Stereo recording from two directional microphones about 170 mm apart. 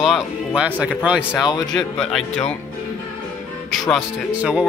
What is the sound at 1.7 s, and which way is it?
Speech, 5° left (ahead or behind).